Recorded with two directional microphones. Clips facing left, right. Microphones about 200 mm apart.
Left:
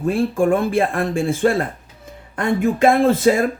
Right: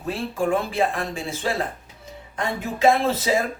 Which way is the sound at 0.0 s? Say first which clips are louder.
Left 7 dB; 50° left (ahead or behind).